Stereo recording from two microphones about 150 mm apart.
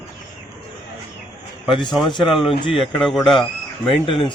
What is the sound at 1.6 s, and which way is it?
Speech, centre (ahead or behind).